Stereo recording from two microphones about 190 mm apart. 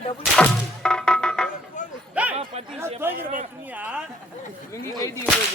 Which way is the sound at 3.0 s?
10° right (ahead or behind).